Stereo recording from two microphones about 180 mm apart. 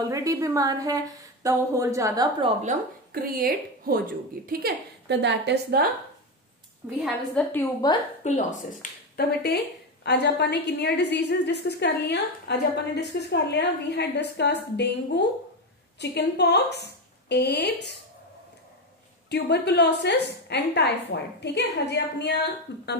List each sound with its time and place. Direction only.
0.0 s a woman's voice: 20° right (ahead or behind)
3.1 s a woman's voice: 55° right (ahead or behind)
6.8 s a woman's voice: 15° right (ahead or behind)
7.4 s a woman's voice: 5° left (ahead or behind)
7.8 s a woman's voice: 20° left (ahead or behind)
8.2 s speech: 40° left (ahead or behind)
9.1 s a woman's voice: 65° left (ahead or behind)
19.2 s a woman's voice: 65° left (ahead or behind)